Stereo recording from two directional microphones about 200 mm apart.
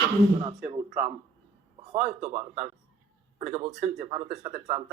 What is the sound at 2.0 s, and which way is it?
Speech, 35° right (ahead or behind).